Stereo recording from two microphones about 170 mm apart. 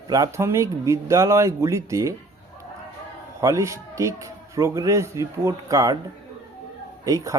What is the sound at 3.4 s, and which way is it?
A man's voice, 20° right (ahead or behind).